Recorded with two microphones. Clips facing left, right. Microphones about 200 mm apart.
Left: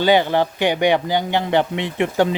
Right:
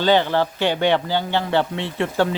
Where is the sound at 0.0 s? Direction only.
15° left (ahead or behind).